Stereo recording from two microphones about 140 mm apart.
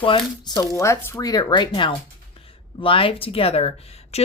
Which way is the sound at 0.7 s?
20° left (ahead or behind).